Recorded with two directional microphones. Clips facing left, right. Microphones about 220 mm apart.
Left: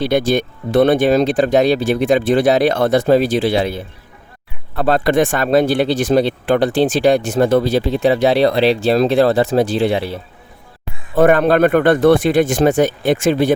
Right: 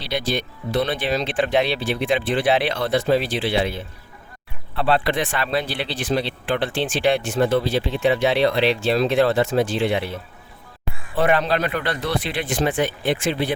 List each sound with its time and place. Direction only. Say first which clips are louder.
0.0 s speech: left 10 dB; 50° left (ahead or behind)
11.1 s speech: left 8 dB; 45° left (ahead or behind)